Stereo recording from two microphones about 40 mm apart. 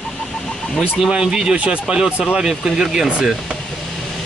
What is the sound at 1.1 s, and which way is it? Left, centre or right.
Speech, centre.